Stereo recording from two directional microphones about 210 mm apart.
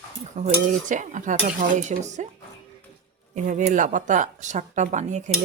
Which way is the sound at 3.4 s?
35° right (ahead or behind).